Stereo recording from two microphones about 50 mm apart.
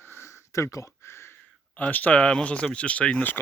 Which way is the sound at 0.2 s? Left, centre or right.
Left.